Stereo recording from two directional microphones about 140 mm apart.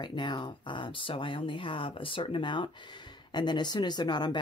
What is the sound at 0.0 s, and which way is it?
Speech, 35° left (ahead or behind).